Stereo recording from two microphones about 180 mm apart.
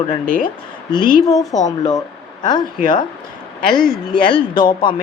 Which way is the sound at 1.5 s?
40° left (ahead or behind).